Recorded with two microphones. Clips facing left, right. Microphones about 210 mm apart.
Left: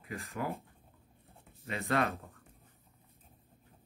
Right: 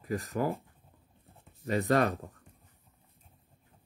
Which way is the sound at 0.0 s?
45° right (ahead or behind).